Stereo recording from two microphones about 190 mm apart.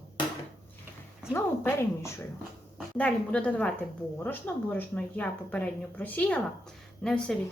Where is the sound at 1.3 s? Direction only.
15° left (ahead or behind).